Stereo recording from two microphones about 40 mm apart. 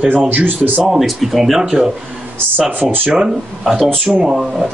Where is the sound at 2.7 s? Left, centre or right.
Right.